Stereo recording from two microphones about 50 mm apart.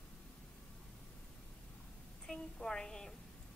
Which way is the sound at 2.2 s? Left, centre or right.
Centre.